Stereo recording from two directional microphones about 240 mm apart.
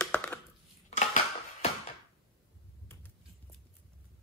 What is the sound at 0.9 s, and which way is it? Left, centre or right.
Cutlery, left.